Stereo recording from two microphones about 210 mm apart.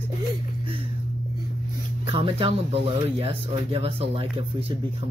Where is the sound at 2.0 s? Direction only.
25° right (ahead or behind).